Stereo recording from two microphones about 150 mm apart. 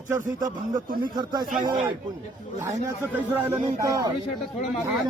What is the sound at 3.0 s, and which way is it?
Speech, 15° right (ahead or behind).